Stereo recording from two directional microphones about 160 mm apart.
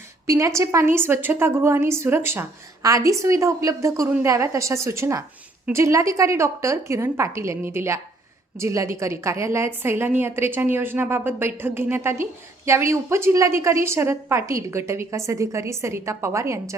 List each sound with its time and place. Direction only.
0.3 s a woman's voice: 20° right (ahead or behind)